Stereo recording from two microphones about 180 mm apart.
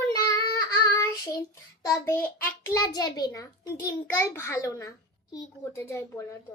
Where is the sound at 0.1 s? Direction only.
20° left (ahead or behind).